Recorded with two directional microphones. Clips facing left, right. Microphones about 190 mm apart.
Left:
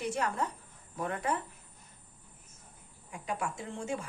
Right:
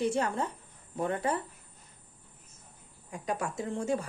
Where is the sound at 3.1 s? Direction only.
40° right (ahead or behind).